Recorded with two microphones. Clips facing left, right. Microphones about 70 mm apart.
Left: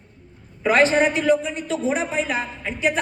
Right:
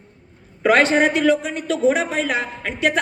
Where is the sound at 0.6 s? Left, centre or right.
Right.